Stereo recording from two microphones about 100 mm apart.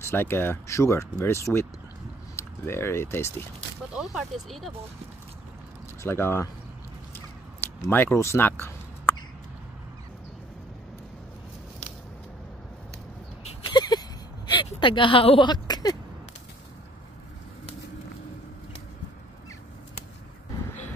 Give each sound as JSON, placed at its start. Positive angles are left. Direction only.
{"t": 0.0, "sound": "speech", "side_deg": 25}
{"t": 3.9, "sound": "speech", "side_deg": -5}
{"t": 6.0, "sound": "speech", "side_deg": 25}
{"t": 7.9, "sound": "speech", "side_deg": 25}
{"t": 13.7, "sound": "a sound", "side_deg": 45}